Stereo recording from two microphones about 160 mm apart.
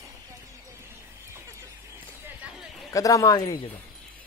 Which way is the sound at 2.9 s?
20° left (ahead or behind).